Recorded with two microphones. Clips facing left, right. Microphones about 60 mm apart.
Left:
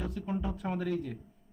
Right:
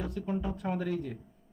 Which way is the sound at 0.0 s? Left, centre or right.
Centre.